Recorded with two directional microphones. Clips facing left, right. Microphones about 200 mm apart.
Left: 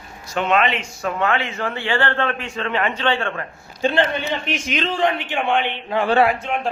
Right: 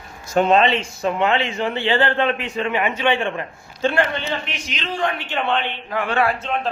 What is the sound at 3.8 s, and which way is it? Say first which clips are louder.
A man's voice: left 1 dB; 15° left (ahead or behind).